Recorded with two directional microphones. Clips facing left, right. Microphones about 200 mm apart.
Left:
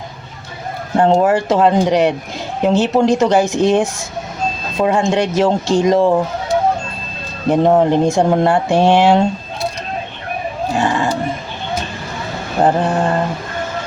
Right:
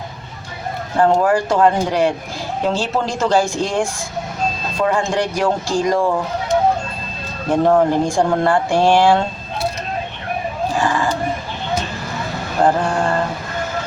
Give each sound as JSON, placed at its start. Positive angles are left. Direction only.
{"t": 0.9, "sound": "speech", "side_deg": 25}
{"t": 7.5, "sound": "speech", "side_deg": 20}
{"t": 10.8, "sound": "a sound", "side_deg": 25}
{"t": 12.6, "sound": "speech", "side_deg": 20}